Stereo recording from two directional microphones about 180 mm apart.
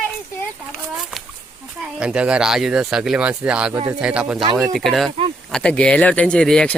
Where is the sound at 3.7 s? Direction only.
20° right (ahead or behind).